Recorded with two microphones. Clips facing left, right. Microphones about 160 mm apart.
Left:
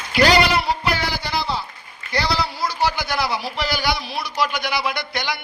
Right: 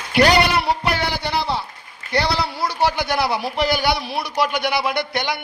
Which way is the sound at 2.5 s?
60° right (ahead or behind).